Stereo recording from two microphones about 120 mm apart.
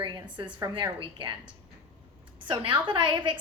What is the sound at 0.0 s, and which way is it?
A woman's voice, 40° right (ahead or behind).